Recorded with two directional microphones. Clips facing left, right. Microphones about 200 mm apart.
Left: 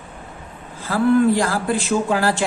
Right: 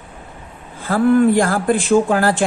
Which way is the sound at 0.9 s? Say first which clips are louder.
Right 3 dB; 50° right (ahead or behind).